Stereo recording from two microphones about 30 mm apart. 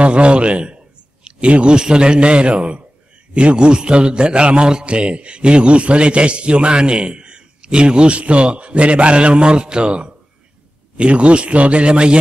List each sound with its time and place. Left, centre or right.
0.0 s a man's voice: right